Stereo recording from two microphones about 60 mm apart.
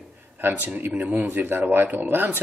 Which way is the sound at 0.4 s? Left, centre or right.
Right.